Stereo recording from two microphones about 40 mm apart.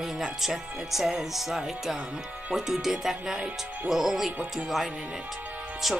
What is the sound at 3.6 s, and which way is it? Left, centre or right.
Speech, right.